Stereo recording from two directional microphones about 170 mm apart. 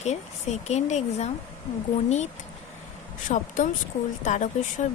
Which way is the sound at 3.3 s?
45° left (ahead or behind).